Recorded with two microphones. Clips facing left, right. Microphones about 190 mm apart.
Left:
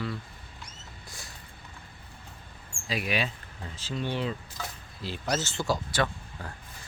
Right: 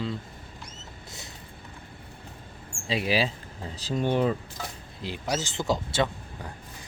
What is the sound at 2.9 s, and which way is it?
Speech, 30° right (ahead or behind).